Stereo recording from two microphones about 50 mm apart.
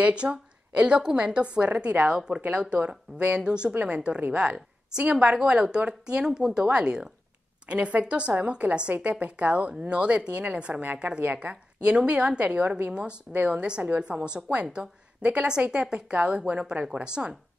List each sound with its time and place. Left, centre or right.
0.0 s a woman's voice: right
2.0 s a woman's voice: centre
13.5 s a woman's voice: right